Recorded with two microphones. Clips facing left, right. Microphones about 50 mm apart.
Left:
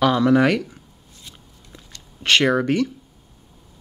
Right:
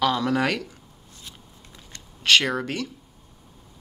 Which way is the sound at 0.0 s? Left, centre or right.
Centre.